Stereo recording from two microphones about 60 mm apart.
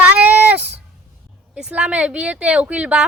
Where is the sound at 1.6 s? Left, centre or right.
Centre.